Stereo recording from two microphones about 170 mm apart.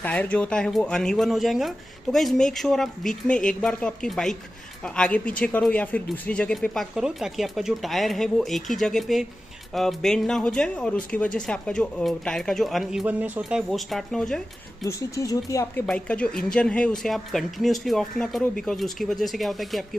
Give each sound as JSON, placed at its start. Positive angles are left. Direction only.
{"t": 0.0, "sound": "speech", "side_deg": 10}
{"t": 14.9, "sound": "speech", "side_deg": 20}
{"t": 15.9, "sound": "speech", "side_deg": 5}